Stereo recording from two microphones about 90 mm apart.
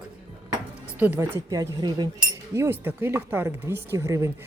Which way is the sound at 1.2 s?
45° right (ahead or behind).